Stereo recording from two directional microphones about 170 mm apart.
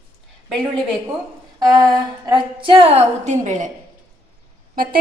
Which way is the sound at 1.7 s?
25° right (ahead or behind).